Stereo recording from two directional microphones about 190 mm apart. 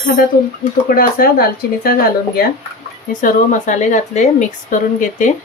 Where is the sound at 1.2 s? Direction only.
50° left (ahead or behind).